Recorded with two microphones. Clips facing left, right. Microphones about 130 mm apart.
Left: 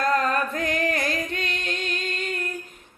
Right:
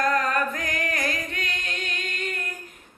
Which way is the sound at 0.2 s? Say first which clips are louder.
Left 1 dB; 30° left (ahead or behind).